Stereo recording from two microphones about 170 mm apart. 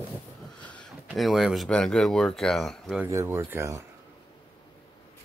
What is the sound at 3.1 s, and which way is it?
Speech, 15° right (ahead or behind).